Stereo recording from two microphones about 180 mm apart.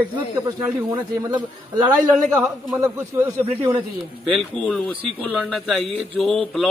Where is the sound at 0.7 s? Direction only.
20° right (ahead or behind).